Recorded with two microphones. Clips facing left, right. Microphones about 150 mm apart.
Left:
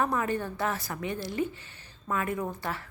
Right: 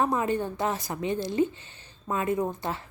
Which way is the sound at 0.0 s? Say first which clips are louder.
Right 3 dB; 20° right (ahead or behind).